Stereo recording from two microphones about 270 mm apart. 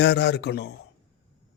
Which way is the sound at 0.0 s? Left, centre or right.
Left.